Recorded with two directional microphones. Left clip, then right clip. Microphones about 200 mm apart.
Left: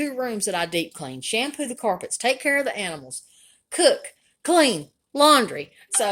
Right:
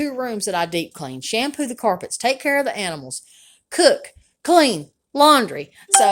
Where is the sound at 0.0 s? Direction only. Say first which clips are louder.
Right 2 dB; 10° right (ahead or behind).